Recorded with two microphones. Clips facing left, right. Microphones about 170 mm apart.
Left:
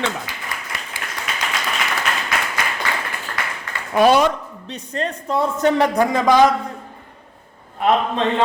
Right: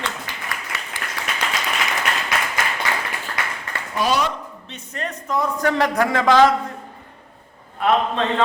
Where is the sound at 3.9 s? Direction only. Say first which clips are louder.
Left 7 dB; 60° left (ahead or behind).